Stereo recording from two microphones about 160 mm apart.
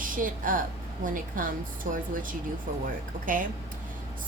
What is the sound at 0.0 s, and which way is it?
A woman's voice, 55° right (ahead or behind).